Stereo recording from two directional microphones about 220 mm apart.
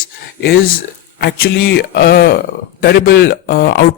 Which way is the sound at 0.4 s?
60° left (ahead or behind).